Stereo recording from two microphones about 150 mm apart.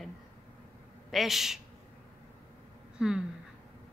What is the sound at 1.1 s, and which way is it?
Speech, centre (ahead or behind).